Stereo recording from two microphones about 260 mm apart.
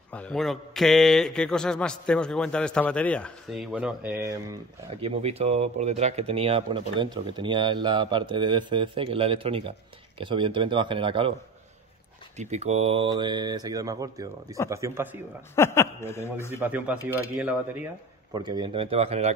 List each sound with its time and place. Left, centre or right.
0.1 s speech: centre
5.0 s speech: right
12.4 s speech: right
15.5 s speech: centre
16.5 s speech: centre
18.3 s speech: centre